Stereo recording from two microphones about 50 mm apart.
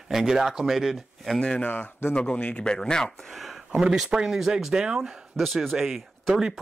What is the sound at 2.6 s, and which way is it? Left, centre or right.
Speech, centre.